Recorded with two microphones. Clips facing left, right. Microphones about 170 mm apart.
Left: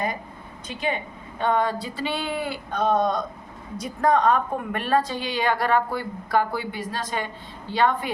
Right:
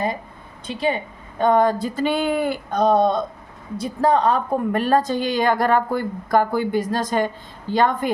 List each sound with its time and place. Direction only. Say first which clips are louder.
0.7 s speech: right 5 dB; 35° right (ahead or behind)
1.4 s a woman's voice: right 6 dB; 45° right (ahead or behind)